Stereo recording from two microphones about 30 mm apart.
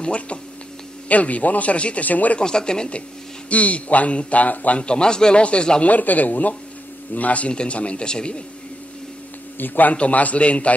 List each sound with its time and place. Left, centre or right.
0.0 s a man's voice: left
1.0 s a man's voice: left
2.0 s speech: left
2.4 s speech: left
3.4 s a man's voice: left
4.7 s a man's voice: left
5.4 s a man's voice: left
5.9 s speech: left
7.2 s a man's voice: left
7.5 s a man's voice: left
8.1 s a man's voice: left
9.6 s speech: left
9.9 s a man's voice: left